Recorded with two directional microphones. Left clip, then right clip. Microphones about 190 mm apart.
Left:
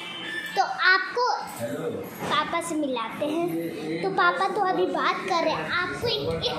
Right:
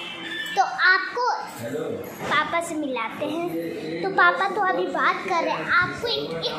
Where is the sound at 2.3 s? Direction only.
10° left (ahead or behind).